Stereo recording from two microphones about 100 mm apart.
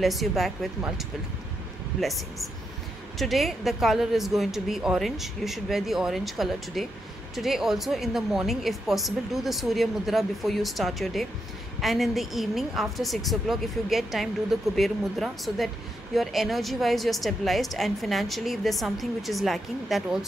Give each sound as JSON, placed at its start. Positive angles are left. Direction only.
{"t": 0.0, "sound": "a woman's voice", "side_deg": 0}